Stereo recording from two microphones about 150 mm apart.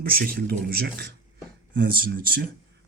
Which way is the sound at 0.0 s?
80° right.